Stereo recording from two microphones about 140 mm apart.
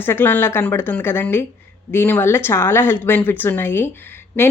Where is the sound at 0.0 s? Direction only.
15° left (ahead or behind).